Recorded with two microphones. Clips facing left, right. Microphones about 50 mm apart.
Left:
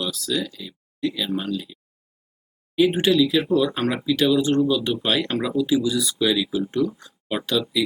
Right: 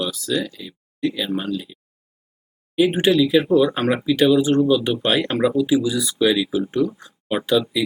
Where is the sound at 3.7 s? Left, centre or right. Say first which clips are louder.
Right 3 dB; centre.